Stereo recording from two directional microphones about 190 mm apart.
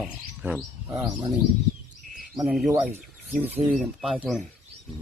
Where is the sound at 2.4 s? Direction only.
Centre (ahead or behind).